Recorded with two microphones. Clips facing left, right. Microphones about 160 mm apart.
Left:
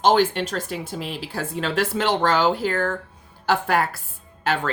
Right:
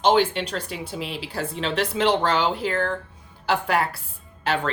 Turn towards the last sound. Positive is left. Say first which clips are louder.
# left 1 dB
turn(degrees=45)  # may be behind; listen again after turning